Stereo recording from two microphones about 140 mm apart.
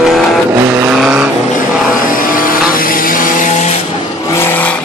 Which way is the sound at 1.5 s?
80° left.